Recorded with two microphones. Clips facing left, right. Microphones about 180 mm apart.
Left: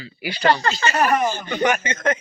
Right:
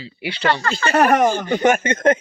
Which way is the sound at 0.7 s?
55° right (ahead or behind).